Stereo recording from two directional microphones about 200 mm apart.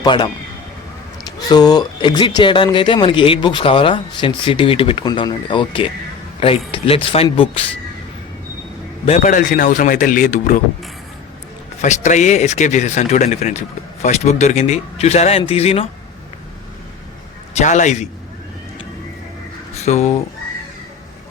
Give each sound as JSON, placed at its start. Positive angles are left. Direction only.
{"t": 0.0, "sound": "speech", "side_deg": 20}
{"t": 1.5, "sound": "speech", "side_deg": 20}
{"t": 9.0, "sound": "speech", "side_deg": 35}
{"t": 11.8, "sound": "speech", "side_deg": 35}
{"t": 17.5, "sound": "speech", "side_deg": 35}
{"t": 19.7, "sound": "speech", "side_deg": 35}